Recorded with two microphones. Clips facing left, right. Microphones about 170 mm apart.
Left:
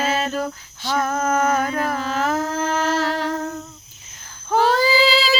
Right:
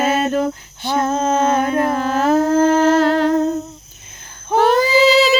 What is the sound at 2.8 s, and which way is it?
Humming, 55° right (ahead or behind).